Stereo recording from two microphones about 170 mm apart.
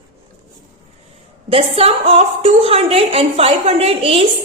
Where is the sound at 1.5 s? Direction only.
35° right (ahead or behind).